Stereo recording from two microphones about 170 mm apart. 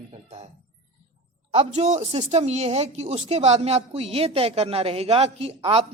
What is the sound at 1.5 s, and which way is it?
Speech, 35° right (ahead or behind).